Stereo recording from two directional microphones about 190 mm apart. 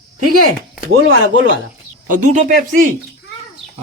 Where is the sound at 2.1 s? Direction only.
45° right (ahead or behind).